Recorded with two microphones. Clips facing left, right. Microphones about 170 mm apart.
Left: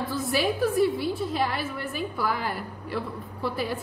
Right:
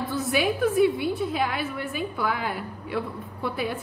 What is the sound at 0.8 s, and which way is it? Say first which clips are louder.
Speech: right 2 dB; 55° right (ahead or behind).